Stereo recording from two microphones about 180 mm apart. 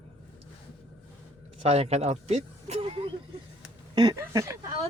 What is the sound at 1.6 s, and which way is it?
Speech, 35° right (ahead or behind).